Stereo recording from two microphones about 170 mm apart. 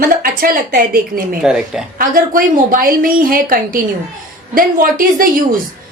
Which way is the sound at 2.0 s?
55° right (ahead or behind).